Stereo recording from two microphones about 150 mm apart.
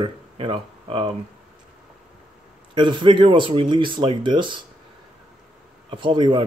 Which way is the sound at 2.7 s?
30° right (ahead or behind).